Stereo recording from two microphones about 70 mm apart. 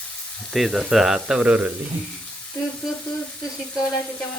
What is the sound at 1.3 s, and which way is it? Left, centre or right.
Speech, centre.